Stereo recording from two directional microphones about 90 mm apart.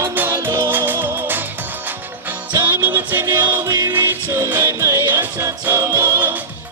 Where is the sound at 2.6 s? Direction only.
25° right (ahead or behind).